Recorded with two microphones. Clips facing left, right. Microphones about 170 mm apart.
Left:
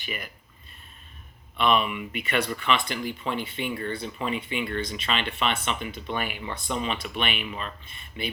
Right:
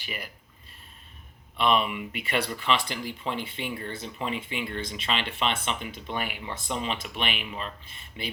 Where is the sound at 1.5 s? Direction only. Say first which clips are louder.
Left 1 dB; 30° right (ahead or behind).